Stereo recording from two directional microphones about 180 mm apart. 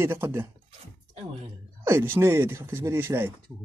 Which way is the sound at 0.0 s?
15° right (ahead or behind).